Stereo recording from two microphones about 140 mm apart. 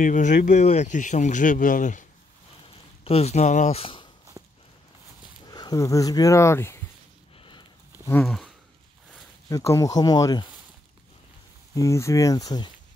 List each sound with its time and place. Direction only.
0.0 s speech: 65° left (ahead or behind)
3.0 s speech: 45° left (ahead or behind)
3.8 s a sound: 35° left (ahead or behind)
4.4 s walk: 20° right (ahead or behind)
5.5 s speech: 30° left (ahead or behind)
8.1 s speech: 5° left (ahead or behind)
9.5 s speech: 25° left (ahead or behind)
11.7 s speech: 20° left (ahead or behind)